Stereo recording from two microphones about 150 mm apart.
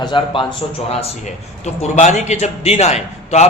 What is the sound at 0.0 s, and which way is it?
Speech, 30° left (ahead or behind).